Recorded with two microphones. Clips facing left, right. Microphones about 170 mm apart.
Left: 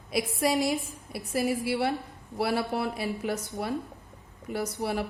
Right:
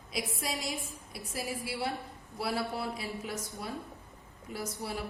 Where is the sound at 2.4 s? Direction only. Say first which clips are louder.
Left 6 dB; 65° left (ahead or behind).